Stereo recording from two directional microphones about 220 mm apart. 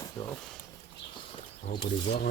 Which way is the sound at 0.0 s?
15° left (ahead or behind).